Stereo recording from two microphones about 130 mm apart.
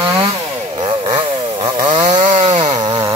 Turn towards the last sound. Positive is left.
turn(degrees=-30)  # may be behind; listen again after turning